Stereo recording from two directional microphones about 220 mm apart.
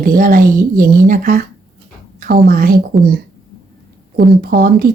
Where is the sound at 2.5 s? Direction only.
40° right (ahead or behind).